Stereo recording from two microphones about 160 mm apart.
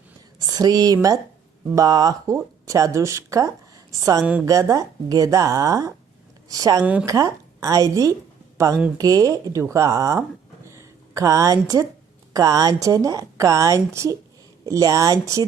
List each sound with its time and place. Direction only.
0.4 s a woman's voice: 25° right (ahead or behind)
4.2 s a woman's voice: 10° right (ahead or behind)
4.4 s a woman's voice: 20° right (ahead or behind)
10.7 s a sound: 20° right (ahead or behind)
12.3 s a woman's voice: 20° right (ahead or behind)